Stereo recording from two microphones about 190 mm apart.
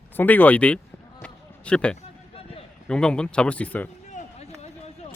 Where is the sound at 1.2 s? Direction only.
5° left (ahead or behind).